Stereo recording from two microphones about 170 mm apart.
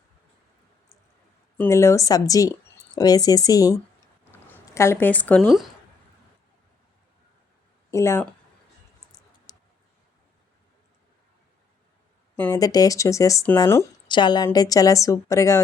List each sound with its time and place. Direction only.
1.5 s a woman's voice: 15° left (ahead or behind)
4.3 s a sound: 10° left (ahead or behind)
7.9 s speech: 20° left (ahead or behind)
9.5 s clicking: 25° left (ahead or behind)
12.4 s a woman's voice: 20° left (ahead or behind)
14.1 s a woman's voice: 25° left (ahead or behind)